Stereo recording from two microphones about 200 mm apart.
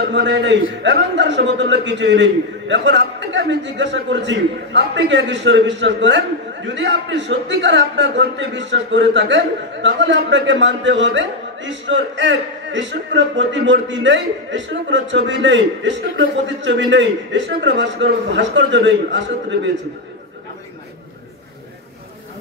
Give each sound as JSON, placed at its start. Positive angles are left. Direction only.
{"t": 0.0, "sound": "a man's voice", "side_deg": -60}